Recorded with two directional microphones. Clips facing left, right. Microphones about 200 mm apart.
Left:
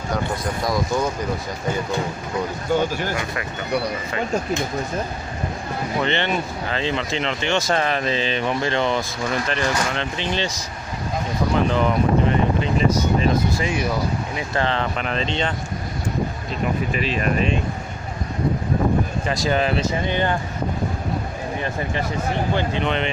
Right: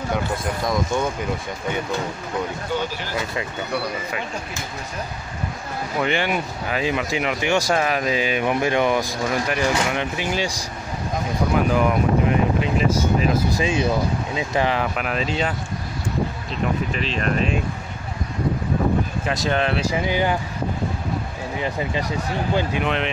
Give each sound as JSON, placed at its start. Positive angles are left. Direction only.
{"t": 0.7, "sound": "speech", "side_deg": 0}
{"t": 2.7, "sound": "speech", "side_deg": 50}
{"t": 5.9, "sound": "speech", "side_deg": -10}
{"t": 11.5, "sound": "speech", "side_deg": -5}
{"t": 13.6, "sound": "speech", "side_deg": -25}
{"t": 16.9, "sound": "speech", "side_deg": 5}
{"t": 19.2, "sound": "speech", "side_deg": 0}
{"t": 21.5, "sound": "speech", "side_deg": -15}